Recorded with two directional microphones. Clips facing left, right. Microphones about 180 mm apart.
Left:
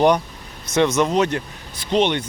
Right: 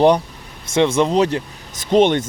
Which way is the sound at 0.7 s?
30° right (ahead or behind).